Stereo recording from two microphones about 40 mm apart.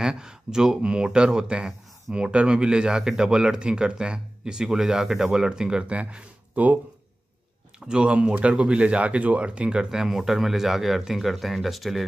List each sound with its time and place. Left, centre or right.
0.0 s speech: centre
5.9 s speech: right
7.8 s speech: right
9.8 s speech: centre